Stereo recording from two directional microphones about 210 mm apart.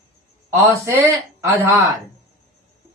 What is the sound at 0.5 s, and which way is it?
A man's voice, 15° right (ahead or behind).